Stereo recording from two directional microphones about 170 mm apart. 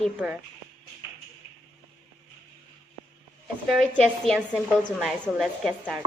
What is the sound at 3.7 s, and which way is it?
A woman's voice, 5° left (ahead or behind).